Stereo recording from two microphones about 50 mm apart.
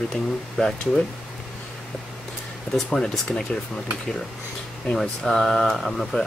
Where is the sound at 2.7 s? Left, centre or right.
Centre.